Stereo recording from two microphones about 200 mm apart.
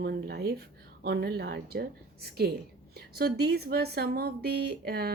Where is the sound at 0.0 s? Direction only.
55° right (ahead or behind).